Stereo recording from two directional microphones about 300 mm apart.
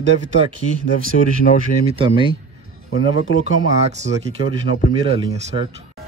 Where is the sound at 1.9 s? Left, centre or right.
Centre.